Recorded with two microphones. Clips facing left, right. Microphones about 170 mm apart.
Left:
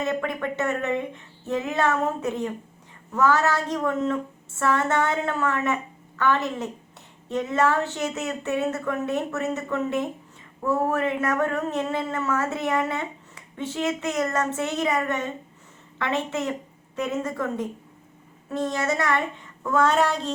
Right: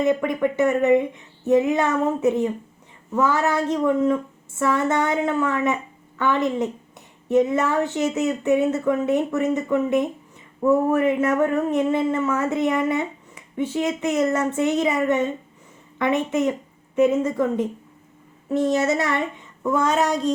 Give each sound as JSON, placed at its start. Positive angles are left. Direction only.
{"t": 0.0, "sound": "a woman's voice", "side_deg": -15}